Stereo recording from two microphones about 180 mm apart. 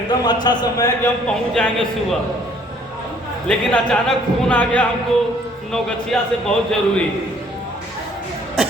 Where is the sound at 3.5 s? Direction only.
5° left (ahead or behind).